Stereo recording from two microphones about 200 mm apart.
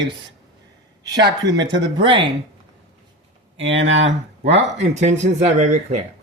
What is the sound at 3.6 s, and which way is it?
Speech, 65° right (ahead or behind).